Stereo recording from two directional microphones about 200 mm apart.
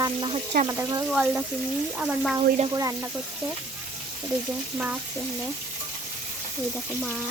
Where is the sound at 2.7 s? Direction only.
15° right (ahead or behind).